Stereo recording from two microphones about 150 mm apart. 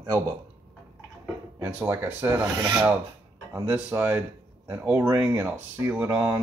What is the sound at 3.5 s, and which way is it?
Speech, 15° right (ahead or behind).